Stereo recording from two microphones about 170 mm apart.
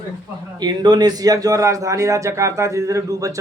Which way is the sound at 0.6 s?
25° right (ahead or behind).